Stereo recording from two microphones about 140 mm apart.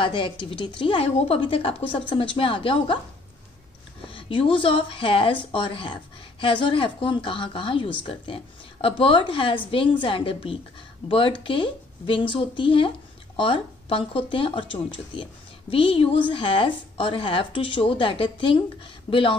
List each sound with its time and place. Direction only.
0.0 s speech: 35° left (ahead or behind)
4.1 s speech: 40° left (ahead or behind)